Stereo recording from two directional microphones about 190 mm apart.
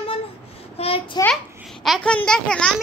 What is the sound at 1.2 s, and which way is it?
Speech, 20° left (ahead or behind).